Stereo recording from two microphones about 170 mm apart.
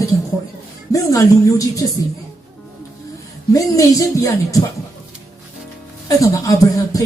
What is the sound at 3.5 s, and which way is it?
Speech, 20° left (ahead or behind).